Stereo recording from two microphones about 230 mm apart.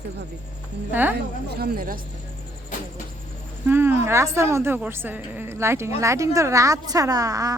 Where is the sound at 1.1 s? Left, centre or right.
Right.